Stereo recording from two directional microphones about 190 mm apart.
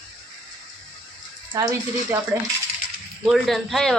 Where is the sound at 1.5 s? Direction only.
15° right (ahead or behind).